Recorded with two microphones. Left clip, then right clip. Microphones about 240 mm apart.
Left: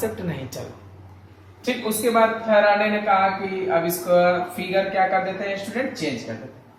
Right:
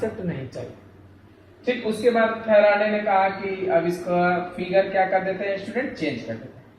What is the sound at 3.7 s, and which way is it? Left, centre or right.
Speech, left.